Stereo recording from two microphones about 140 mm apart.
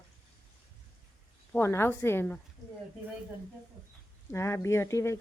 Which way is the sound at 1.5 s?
15° left (ahead or behind).